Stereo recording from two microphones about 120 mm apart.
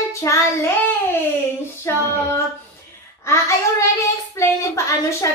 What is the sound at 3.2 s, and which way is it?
Child singing, 25° left (ahead or behind).